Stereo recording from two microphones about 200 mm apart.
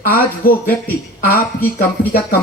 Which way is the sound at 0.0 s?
45° left (ahead or behind).